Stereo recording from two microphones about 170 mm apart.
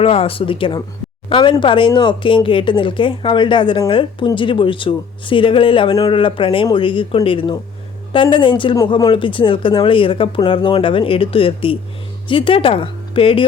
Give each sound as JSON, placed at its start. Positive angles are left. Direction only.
{"t": 0.0, "sound": "speech", "side_deg": 35}